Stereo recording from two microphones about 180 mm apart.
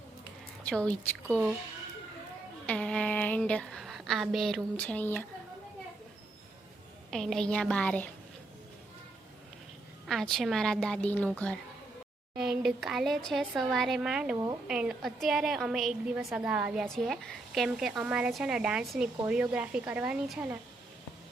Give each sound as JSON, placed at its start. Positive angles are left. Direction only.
{"t": 0.6, "sound": "a woman's voice", "side_deg": 5}
{"t": 2.6, "sound": "speech", "side_deg": 5}
{"t": 7.1, "sound": "speech", "side_deg": 0}
{"t": 10.1, "sound": "speech", "side_deg": 0}
{"t": 14.3, "sound": "speech", "side_deg": -20}
{"t": 14.7, "sound": "a woman's voice", "side_deg": -5}